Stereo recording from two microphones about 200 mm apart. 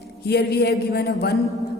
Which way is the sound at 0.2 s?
55° left (ahead or behind).